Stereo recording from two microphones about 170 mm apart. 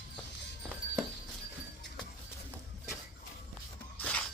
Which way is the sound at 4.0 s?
10° left (ahead or behind).